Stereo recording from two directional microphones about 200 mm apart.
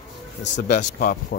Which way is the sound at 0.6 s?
35° left (ahead or behind).